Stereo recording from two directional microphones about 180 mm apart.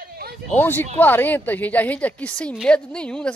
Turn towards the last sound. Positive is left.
turn(degrees=5)  # may be behind; listen again after turning